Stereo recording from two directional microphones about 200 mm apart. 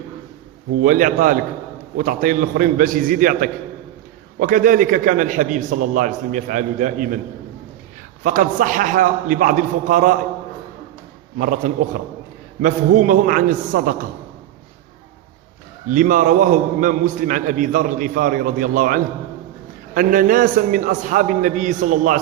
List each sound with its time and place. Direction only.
0.8 s a man's voice: 40° right (ahead or behind)
8.2 s a man's voice: 40° right (ahead or behind)
11.3 s a man's voice: 40° right (ahead or behind)
15.9 s a man's voice: 40° right (ahead or behind)